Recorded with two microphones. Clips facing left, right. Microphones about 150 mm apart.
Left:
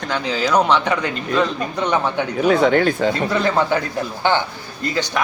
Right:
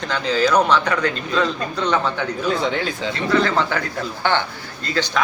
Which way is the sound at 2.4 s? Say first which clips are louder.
Left 8 dB; 55° left (ahead or behind).